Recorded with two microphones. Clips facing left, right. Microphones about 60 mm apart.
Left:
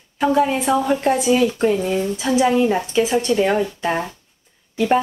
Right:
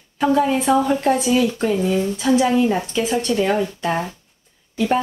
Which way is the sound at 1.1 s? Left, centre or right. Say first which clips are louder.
Left 1 dB; left.